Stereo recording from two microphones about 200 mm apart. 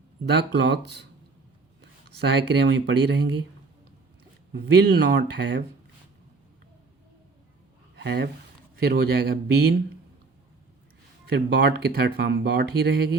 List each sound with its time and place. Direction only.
0.3 s speech: 60° right (ahead or behind)
4.5 s speech: 55° right (ahead or behind)
7.9 s speech: 60° right (ahead or behind)
11.3 s speech: 55° right (ahead or behind)